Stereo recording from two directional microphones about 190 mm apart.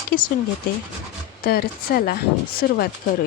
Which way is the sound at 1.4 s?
55° left (ahead or behind).